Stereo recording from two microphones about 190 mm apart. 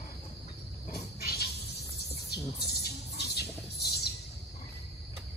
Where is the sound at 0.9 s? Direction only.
55° left (ahead or behind).